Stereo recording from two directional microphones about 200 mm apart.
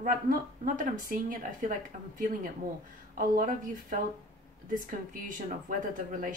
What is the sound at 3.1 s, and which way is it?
A woman's voice, 45° right (ahead or behind).